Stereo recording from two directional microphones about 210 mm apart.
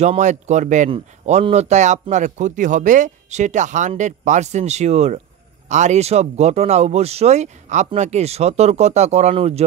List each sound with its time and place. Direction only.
0.0 s speech: 35° right (ahead or behind)